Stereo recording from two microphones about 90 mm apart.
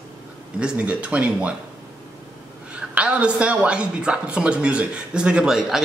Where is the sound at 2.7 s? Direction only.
15° right (ahead or behind).